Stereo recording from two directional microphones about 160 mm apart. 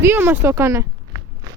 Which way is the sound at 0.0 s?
15° right (ahead or behind).